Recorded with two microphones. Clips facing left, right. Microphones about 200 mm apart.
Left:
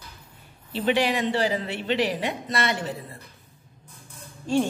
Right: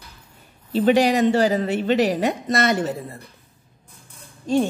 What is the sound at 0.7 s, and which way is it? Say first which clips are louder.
Speech: right 7 dB; 45° right (ahead or behind).